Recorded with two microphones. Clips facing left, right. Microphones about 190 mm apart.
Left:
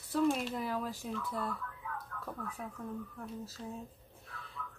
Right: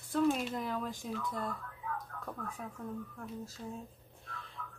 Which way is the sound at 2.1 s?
35° right (ahead or behind).